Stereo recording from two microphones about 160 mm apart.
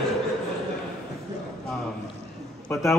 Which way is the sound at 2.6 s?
Centre (ahead or behind).